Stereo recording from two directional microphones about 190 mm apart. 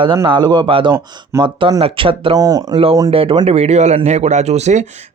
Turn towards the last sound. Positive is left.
turn(degrees=-35)  # may be behind; listen again after turning